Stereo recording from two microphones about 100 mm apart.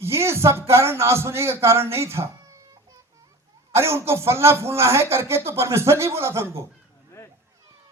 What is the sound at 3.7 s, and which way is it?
A man's voice, 25° right (ahead or behind).